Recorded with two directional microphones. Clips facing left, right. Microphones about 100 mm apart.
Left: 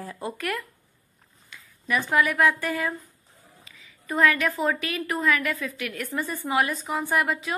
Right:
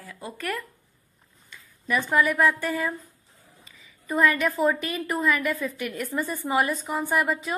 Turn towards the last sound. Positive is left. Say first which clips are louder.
# even
turn(degrees=0)  # may be behind; listen again after turning